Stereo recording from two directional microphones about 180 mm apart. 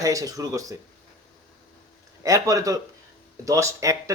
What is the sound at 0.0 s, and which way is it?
Speech, 20° right (ahead or behind).